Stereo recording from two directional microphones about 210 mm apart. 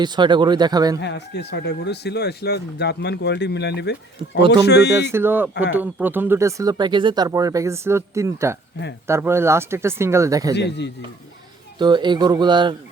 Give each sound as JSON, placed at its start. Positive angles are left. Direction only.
{"t": 0.0, "sound": "speech", "side_deg": -20}
{"t": 0.9, "sound": "speech", "side_deg": 55}
{"t": 5.1, "sound": "speech", "side_deg": -10}
{"t": 10.5, "sound": "a man's voice", "side_deg": 55}
{"t": 11.8, "sound": "speech", "side_deg": -20}